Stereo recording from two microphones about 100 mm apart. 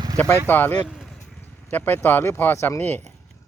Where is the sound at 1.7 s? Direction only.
20° left (ahead or behind).